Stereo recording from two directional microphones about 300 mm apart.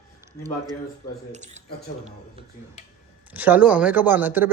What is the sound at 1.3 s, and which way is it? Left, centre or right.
Speech, right.